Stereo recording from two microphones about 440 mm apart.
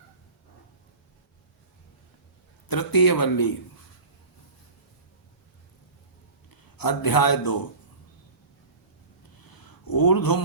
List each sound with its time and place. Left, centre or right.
2.6 s speech: left
6.5 s a man's voice: left
9.5 s a sound: left